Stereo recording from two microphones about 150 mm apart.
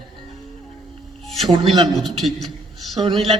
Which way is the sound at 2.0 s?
Centre (ahead or behind).